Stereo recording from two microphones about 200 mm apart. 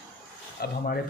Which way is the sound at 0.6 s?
50° left (ahead or behind).